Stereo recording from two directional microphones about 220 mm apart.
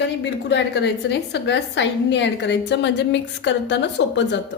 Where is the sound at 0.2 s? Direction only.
50° left (ahead or behind).